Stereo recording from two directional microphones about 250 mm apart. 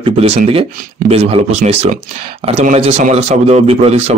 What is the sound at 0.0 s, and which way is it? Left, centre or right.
A man's voice, right.